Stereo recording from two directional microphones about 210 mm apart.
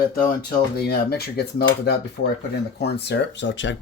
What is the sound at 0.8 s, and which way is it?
Speech, 50° left (ahead or behind).